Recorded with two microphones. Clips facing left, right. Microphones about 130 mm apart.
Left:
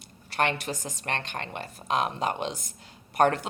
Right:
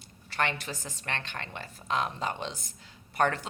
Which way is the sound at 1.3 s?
55° left (ahead or behind).